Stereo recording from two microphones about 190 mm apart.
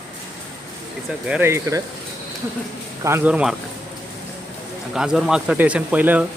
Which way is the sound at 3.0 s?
10° right (ahead or behind).